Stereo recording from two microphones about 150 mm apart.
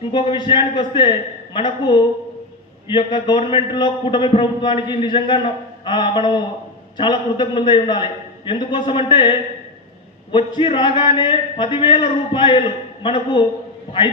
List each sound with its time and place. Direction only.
0.1 s a man's voice: 30° left (ahead or behind)
5.8 s a sound: 30° left (ahead or behind)
6.9 s a man's voice: 30° left (ahead or behind)
10.3 s a man's voice: 35° left (ahead or behind)